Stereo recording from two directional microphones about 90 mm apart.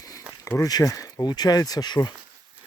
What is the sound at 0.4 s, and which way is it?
Speech, 35° left (ahead or behind).